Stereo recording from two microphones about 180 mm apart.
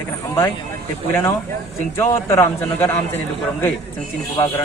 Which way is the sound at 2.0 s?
15° left (ahead or behind).